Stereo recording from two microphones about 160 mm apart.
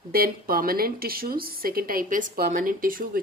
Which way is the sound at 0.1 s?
70° right (ahead or behind).